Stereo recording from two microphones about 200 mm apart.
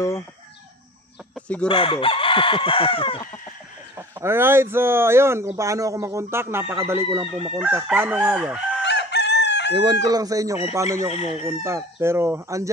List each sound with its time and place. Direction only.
1.3 s chicken: 5° left (ahead or behind)
1.7 s speech: 25° left (ahead or behind)
4.2 s speech: 10° right (ahead or behind)
8.8 s chicken: 60° left (ahead or behind)
10.0 s speech: 20° right (ahead or behind)
11.0 s chicken: 30° left (ahead or behind)
11.6 s speech: 15° right (ahead or behind)